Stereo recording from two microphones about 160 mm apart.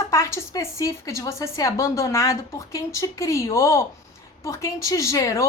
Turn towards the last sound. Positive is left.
turn(degrees=20)  # may be behind; listen again after turning